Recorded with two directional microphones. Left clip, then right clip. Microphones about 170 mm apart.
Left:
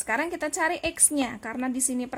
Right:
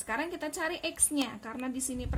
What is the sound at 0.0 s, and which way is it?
A woman's voice, 50° left (ahead or behind).